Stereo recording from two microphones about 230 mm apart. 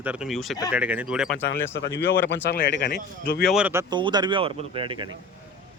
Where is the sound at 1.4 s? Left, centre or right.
Left.